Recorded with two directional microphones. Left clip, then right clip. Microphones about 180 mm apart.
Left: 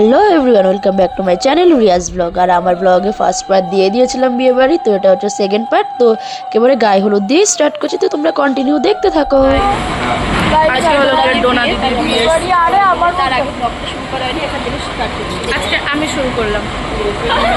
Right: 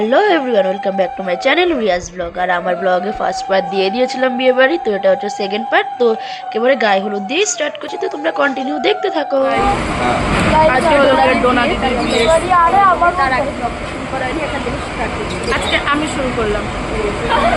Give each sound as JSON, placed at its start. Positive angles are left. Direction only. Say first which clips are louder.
{"t": 0.0, "sound": "speech", "louder": "left 4 dB", "side_deg": 40}
{"t": 10.7, "sound": "speech", "louder": "even", "side_deg": 0}
{"t": 12.5, "sound": "a woman's voice", "louder": "even", "side_deg": 15}